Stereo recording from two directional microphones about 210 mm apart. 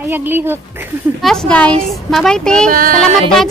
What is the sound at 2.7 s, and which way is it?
Speech, 40° right (ahead or behind).